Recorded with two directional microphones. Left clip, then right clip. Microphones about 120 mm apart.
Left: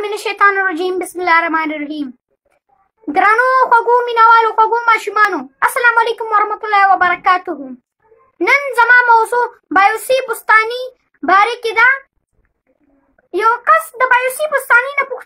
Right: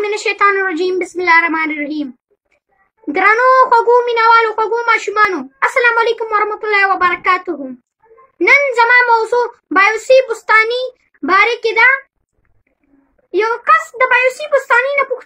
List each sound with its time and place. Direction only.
0.0 s speech: 55° left (ahead or behind)
3.1 s a child's voice: 55° left (ahead or behind)
13.3 s a child's voice: 50° left (ahead or behind)